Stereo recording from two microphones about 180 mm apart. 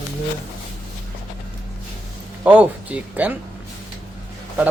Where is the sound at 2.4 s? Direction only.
10° right (ahead or behind).